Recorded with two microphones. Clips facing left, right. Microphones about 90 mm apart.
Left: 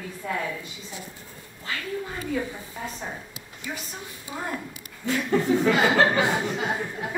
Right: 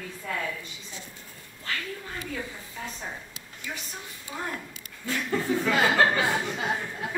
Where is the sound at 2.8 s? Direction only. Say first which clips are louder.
Left 2 dB; 15° left (ahead or behind).